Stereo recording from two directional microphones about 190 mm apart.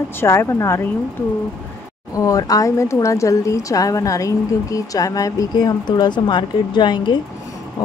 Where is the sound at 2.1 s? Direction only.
15° left (ahead or behind).